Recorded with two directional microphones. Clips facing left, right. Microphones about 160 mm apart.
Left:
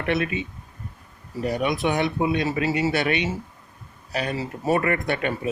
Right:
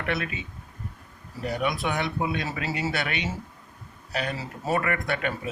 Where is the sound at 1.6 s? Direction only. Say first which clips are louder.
Left 4 dB; 20° left (ahead or behind).